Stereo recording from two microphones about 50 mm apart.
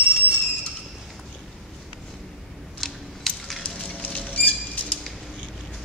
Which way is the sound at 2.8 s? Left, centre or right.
Centre.